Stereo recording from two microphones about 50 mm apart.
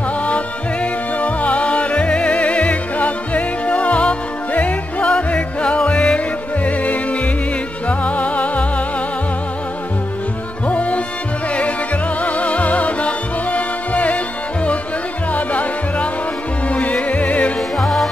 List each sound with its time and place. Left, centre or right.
1.1 s music: left
8.0 s music: left
10.7 s music: left
12.2 s music: left
17.7 s music: centre